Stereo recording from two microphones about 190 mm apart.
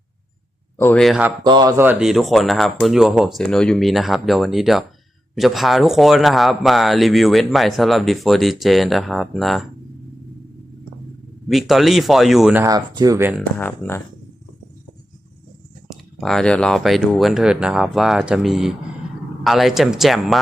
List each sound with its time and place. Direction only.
0.8 s a man's voice: 5° left (ahead or behind)
1.5 s a man's voice: 20° right (ahead or behind); by 9.6 s centre (ahead or behind)
11.4 s a man's voice: centre (ahead or behind)
12.6 s speech: 20° right (ahead or behind)
13.6 s speech: 10° left (ahead or behind)
15.9 s a man's voice: centre (ahead or behind)